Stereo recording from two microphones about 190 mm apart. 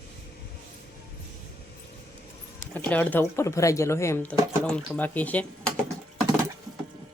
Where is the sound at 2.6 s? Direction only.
10° left (ahead or behind).